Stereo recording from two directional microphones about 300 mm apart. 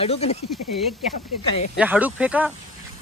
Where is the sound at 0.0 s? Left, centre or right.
Left.